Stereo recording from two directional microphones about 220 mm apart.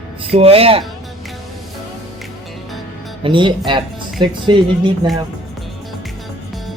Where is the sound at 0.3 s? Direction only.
25° right (ahead or behind).